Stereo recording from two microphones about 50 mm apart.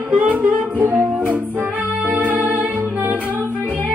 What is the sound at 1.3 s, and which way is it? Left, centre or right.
Music, right.